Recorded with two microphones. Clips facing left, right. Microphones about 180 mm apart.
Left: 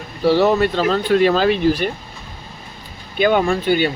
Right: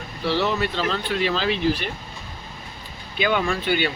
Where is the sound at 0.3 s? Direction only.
45° left (ahead or behind).